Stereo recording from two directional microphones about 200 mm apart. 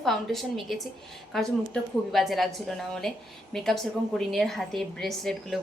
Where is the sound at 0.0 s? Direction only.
Centre (ahead or behind).